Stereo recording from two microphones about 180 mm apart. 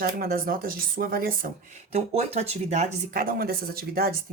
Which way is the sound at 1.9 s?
35° right (ahead or behind).